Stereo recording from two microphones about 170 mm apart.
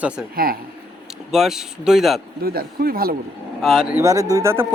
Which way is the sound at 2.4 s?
60° right (ahead or behind).